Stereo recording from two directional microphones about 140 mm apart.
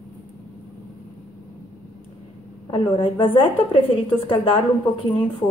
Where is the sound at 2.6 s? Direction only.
35° left (ahead or behind).